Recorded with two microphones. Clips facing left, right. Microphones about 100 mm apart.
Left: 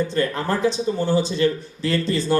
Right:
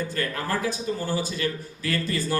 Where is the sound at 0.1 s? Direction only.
25° left (ahead or behind).